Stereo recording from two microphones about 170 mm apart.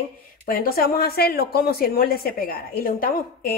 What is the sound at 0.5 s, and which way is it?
A woman's voice, 60° left (ahead or behind).